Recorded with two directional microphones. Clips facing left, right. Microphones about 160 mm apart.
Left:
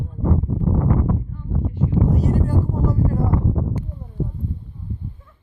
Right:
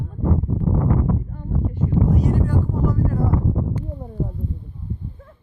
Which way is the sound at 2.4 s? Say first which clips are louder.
Even; 35° left (ahead or behind).